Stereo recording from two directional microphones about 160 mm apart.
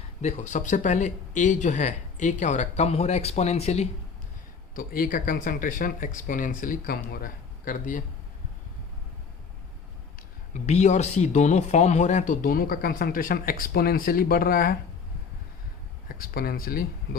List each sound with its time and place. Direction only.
0.2 s speech: 45° left (ahead or behind)
4.7 s speech: 60° left (ahead or behind)
10.5 s speech: 45° left (ahead or behind); by 14.8 s 65° left (ahead or behind)
16.0 s speech: 65° left (ahead or behind)